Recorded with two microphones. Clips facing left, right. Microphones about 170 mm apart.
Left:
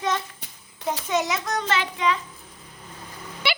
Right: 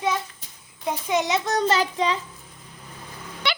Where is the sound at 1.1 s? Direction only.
15° right (ahead or behind).